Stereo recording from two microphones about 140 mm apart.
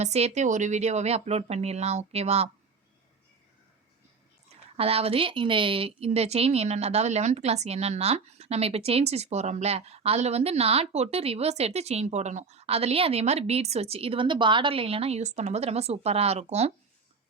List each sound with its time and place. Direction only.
0.0 s a woman's voice: 50° right (ahead or behind)
4.8 s a woman's voice: 45° right (ahead or behind)